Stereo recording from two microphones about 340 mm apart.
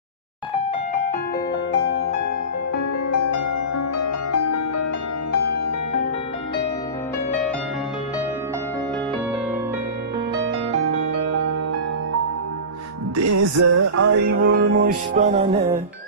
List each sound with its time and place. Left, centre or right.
3.1 s music: left
11.1 s music: right
13.1 s music: right
14.8 s music: right